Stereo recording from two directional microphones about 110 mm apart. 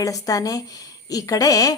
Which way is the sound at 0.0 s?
30° left (ahead or behind).